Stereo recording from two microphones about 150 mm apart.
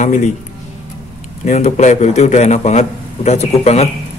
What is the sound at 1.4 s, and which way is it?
Speech, 50° left (ahead or behind).